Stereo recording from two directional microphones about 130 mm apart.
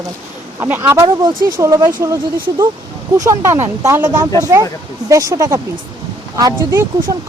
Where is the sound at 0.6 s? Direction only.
20° right (ahead or behind).